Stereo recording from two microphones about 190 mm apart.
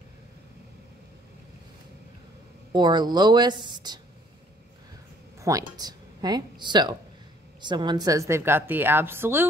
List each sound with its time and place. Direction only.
2.7 s speech: 20° right (ahead or behind)
5.4 s a woman's voice: 20° right (ahead or behind)